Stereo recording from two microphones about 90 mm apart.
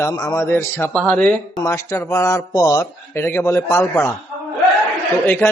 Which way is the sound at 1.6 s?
35° left (ahead or behind).